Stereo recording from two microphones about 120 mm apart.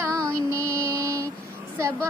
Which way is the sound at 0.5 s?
25° right (ahead or behind).